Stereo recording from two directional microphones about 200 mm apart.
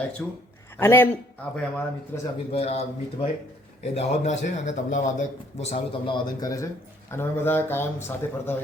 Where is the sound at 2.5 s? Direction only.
30° left (ahead or behind).